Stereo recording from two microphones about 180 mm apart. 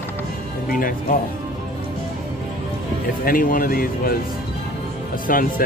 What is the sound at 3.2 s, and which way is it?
Speech, 50° left (ahead or behind).